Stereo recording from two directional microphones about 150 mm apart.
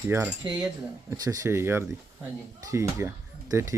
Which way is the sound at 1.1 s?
25° right (ahead or behind).